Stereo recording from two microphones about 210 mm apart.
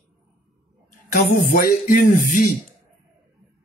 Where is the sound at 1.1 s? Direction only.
40° left (ahead or behind).